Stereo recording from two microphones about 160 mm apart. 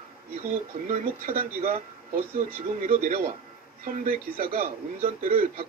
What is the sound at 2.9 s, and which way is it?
Speech, 60° right (ahead or behind).